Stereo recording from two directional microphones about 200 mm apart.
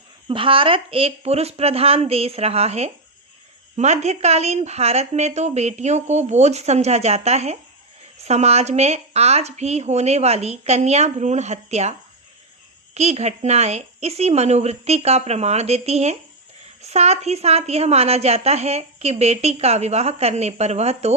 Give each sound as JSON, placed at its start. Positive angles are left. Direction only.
{"t": 0.3, "sound": "a woman's voice", "side_deg": -25}